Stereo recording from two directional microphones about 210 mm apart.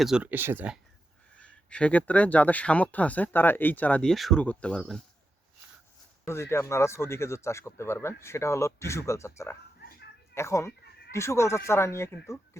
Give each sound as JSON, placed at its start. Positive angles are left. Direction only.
{"t": 0.0, "sound": "speech", "side_deg": -5}
{"t": 1.4, "sound": "speech", "side_deg": 5}
{"t": 6.2, "sound": "speech", "side_deg": 10}